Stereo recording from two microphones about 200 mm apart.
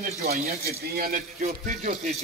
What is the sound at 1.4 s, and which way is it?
Speech, 35° right (ahead or behind).